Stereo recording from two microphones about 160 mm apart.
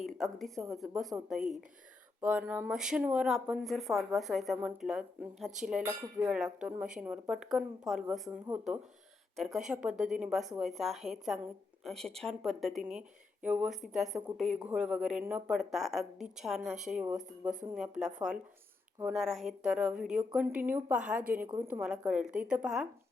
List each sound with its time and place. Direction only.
0.0 s speech: centre (ahead or behind)
2.5 s speech: 5° right (ahead or behind)